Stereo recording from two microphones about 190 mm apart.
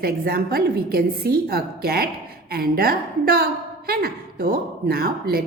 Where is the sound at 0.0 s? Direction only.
55° right (ahead or behind).